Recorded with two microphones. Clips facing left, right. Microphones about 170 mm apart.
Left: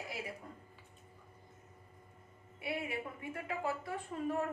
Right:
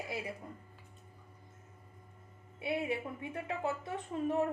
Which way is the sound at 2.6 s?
25° right (ahead or behind).